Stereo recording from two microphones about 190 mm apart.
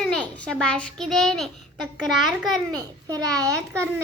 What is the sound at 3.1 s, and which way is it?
Speech, 20° right (ahead or behind).